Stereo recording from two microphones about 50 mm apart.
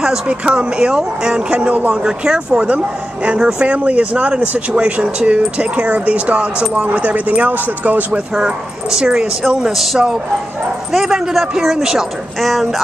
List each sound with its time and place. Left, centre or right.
0.3 s speech: right
1.7 s speech: right
2.0 s speech: centre; by 8.2 s right
8.4 s speech: centre
9.7 s speech: centre